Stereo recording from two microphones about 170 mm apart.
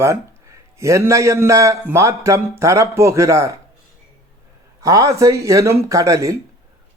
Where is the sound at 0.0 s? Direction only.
15° right (ahead or behind).